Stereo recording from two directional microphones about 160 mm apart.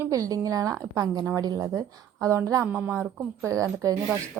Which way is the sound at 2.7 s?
10° right (ahead or behind).